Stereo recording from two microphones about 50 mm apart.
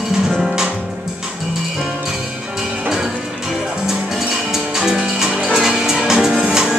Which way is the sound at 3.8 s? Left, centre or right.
Centre.